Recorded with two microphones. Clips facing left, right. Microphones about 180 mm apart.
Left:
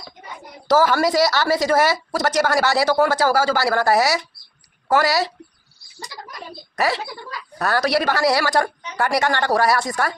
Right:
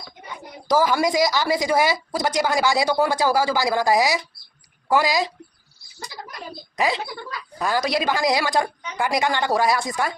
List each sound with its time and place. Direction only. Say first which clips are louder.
0.7 s a woman's voice: left 2 dB; 15° right (ahead or behind)
6.7 s a woman's voice: left 1 dB; 15° right (ahead or behind)